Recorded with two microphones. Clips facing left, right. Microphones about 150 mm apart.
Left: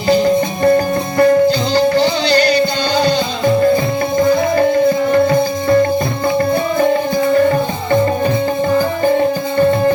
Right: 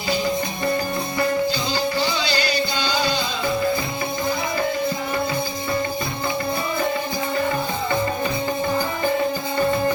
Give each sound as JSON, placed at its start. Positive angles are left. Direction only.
{"t": 0.1, "sound": "music", "side_deg": 55}
{"t": 5.1, "sound": "music", "side_deg": 50}